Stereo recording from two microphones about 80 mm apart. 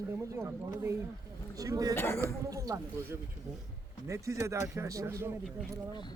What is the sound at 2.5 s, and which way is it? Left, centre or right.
Speech, right.